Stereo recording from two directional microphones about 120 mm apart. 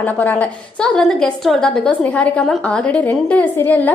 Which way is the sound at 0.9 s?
5° left (ahead or behind).